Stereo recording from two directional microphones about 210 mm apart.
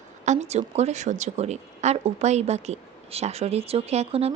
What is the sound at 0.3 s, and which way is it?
A woman's voice, 30° right (ahead or behind).